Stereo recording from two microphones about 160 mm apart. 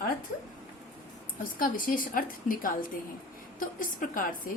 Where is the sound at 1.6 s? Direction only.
60° left (ahead or behind).